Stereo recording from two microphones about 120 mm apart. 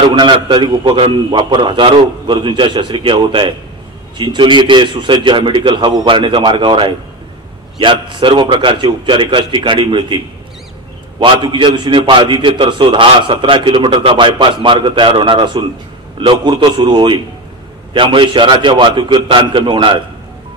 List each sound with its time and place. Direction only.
0.1 s a man's voice: 40° right (ahead or behind)
0.8 s a man's voice: 50° right (ahead or behind)